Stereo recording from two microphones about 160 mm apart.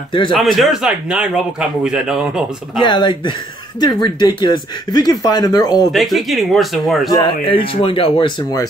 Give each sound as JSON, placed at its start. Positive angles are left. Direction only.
{"t": 0.3, "sound": "a man's voice", "side_deg": 0}
{"t": 2.8, "sound": "speech", "side_deg": 30}
{"t": 5.9, "sound": "a man's voice", "side_deg": 0}
{"t": 7.1, "sound": "speech", "side_deg": 25}